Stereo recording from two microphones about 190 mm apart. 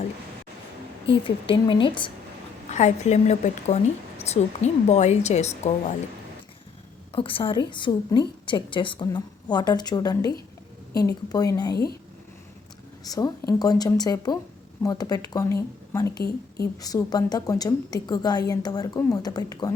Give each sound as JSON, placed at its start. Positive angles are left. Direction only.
{"t": 1.0, "sound": "a woman's voice", "side_deg": 25}
{"t": 2.6, "sound": "a woman's voice", "side_deg": 35}
{"t": 7.1, "sound": "a woman's voice", "side_deg": 30}
{"t": 13.1, "sound": "a woman's voice", "side_deg": 20}